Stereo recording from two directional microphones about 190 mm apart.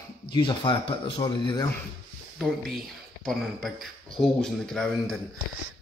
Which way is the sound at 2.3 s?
Centre (ahead or behind).